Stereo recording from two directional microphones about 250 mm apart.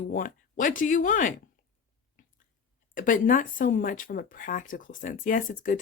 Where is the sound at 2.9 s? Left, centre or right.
Left.